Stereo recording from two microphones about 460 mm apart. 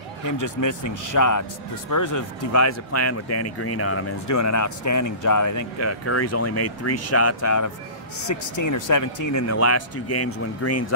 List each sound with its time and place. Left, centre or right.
0.2 s speech: left